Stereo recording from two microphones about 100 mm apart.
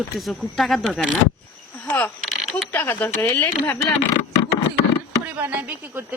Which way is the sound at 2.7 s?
20° left (ahead or behind).